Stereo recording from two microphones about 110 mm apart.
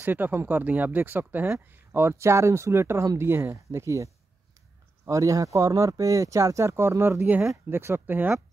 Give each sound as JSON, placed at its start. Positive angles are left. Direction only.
{"t": 0.0, "sound": "speech", "side_deg": -15}